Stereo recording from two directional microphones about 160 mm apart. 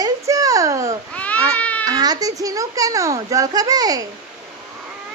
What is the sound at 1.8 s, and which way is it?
A child's voice, 25° right (ahead or behind).